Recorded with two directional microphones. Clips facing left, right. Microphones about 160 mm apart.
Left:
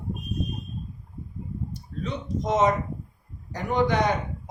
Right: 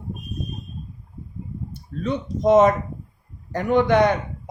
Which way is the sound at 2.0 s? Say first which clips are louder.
Right 8 dB; 60° right (ahead or behind).